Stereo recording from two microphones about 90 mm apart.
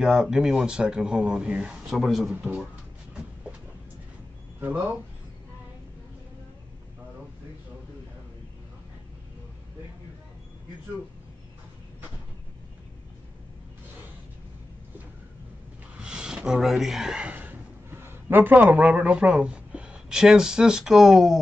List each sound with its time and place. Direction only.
0.0 s speech: 5° right (ahead or behind)
4.6 s speech: 20° right (ahead or behind)
16.0 s speech: 10° right (ahead or behind)